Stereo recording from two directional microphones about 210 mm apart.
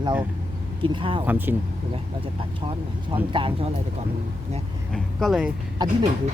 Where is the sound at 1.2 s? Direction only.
10° right (ahead or behind).